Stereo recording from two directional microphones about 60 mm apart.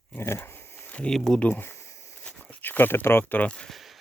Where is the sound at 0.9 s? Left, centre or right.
Centre.